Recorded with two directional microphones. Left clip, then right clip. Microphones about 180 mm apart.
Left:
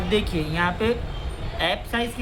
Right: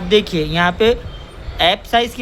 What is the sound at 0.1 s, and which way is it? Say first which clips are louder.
A man's voice: right 10 dB; 50° right (ahead or behind).